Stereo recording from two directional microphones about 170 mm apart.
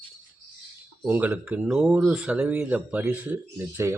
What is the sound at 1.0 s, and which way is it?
Speech, 10° right (ahead or behind).